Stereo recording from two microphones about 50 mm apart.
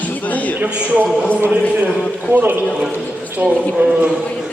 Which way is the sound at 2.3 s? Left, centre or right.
Right.